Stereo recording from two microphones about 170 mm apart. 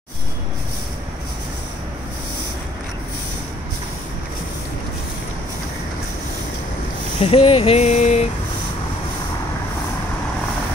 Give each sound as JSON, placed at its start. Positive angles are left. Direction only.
{"t": 7.2, "sound": "speech", "side_deg": 35}